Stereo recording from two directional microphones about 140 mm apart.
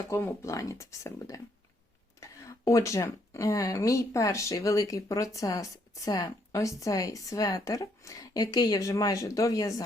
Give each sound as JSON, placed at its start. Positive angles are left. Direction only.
{"t": 0.1, "sound": "speech", "side_deg": 20}